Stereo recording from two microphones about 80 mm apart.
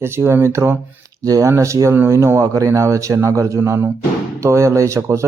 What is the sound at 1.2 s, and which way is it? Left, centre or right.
Speech, right.